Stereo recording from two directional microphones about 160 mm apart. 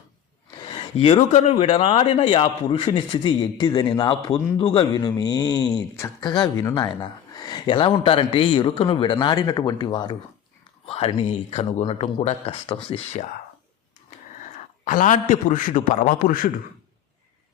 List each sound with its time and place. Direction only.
0.6 s speech: 30° left (ahead or behind)
14.8 s a man's voice: 55° left (ahead or behind)